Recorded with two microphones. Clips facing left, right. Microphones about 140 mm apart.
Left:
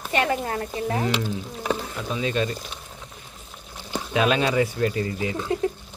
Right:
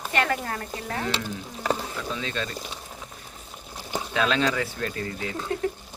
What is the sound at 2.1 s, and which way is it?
Speech, 15° left (ahead or behind).